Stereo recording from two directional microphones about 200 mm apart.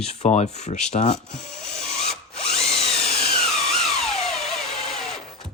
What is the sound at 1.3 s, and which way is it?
Speech, 5° left (ahead or behind).